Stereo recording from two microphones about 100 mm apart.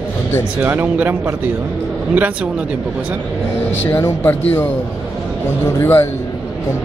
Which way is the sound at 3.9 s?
20° left (ahead or behind).